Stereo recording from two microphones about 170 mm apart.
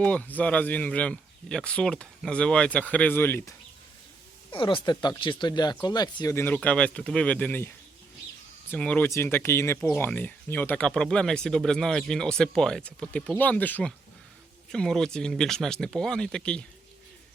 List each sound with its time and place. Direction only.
0.0 s speech: 10° left (ahead or behind)
4.5 s speech: 30° left (ahead or behind); by 7.7 s 10° left (ahead or behind)
8.7 s speech: 10° left (ahead or behind)